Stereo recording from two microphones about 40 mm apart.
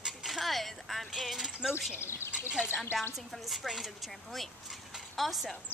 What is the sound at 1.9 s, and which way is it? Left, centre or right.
Speech, left.